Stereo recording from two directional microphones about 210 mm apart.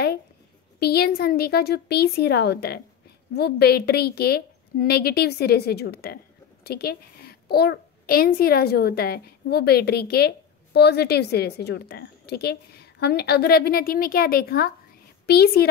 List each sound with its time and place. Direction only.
0.7 s a woman's voice: 50° left (ahead or behind)